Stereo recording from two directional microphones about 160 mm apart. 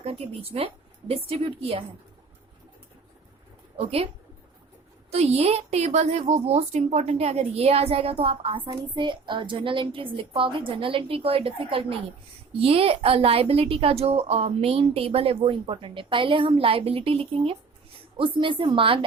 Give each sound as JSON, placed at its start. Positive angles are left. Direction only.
{"t": 0.0, "sound": "a woman's voice", "side_deg": -35}
{"t": 3.8, "sound": "a woman's voice", "side_deg": -40}
{"t": 5.1, "sound": "a woman's voice", "side_deg": -40}